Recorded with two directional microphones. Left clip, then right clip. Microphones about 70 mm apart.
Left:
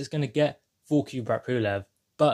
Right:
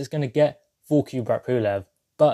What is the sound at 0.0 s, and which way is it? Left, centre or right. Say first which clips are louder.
Speech: right 5 dB; right.